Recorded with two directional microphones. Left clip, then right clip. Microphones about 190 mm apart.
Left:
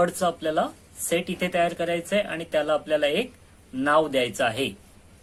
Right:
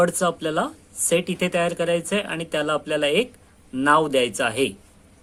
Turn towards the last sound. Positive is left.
turn(degrees=-40)  # may be behind; listen again after turning